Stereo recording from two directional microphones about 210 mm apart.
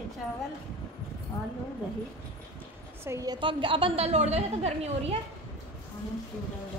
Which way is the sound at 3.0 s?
15° right (ahead or behind).